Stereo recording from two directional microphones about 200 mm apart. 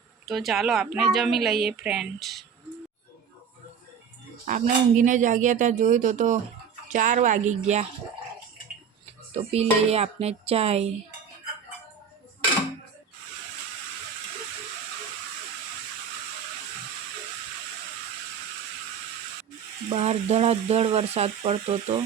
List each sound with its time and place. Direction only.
0.3 s a woman's voice: centre (ahead or behind)
4.4 s speech: 40° right (ahead or behind)
9.3 s speech: 30° right (ahead or behind)
19.9 s speech: 30° right (ahead or behind)